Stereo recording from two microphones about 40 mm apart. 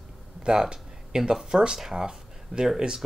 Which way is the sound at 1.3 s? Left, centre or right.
Centre.